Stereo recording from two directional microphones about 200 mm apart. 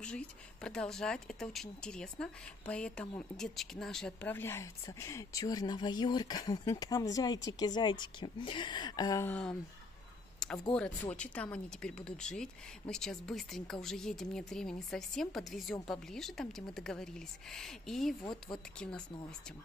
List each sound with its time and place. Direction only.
0.0 s speech: 5° left (ahead or behind)
10.7 s speech: 5° left (ahead or behind)